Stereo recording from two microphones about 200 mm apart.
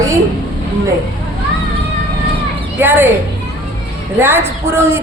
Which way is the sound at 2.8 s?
10° right (ahead or behind).